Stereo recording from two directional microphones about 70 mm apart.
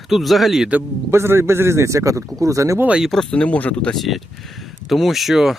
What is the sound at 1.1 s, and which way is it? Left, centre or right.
Speech, right.